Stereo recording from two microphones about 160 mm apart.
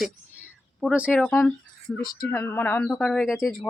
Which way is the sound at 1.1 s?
10° left (ahead or behind).